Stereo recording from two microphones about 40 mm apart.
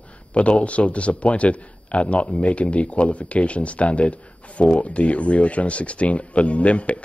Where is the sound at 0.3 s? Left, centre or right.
Left.